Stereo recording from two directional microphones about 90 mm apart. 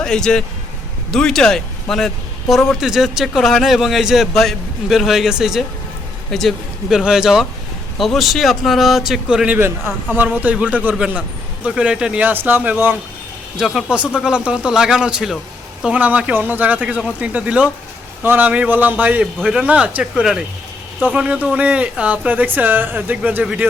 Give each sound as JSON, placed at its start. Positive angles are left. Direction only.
{"t": 0.0, "sound": "a man's voice", "side_deg": 5}
{"t": 9.6, "sound": "a man's voice", "side_deg": -25}
{"t": 13.6, "sound": "a man's voice", "side_deg": 0}